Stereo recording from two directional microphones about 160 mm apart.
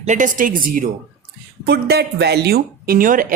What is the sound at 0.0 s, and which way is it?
Speech, 50° right (ahead or behind).